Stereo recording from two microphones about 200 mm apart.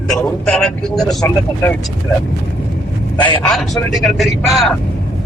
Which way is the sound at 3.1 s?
20° left (ahead or behind).